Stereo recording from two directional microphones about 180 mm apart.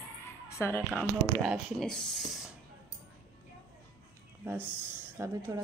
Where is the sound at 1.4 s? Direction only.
5° left (ahead or behind).